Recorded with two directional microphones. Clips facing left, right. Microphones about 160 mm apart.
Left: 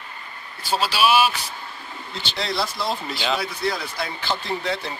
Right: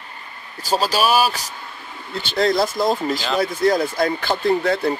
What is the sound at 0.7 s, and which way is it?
Speech, 40° right (ahead or behind).